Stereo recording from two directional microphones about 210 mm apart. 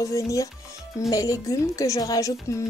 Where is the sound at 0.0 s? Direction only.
15° left (ahead or behind).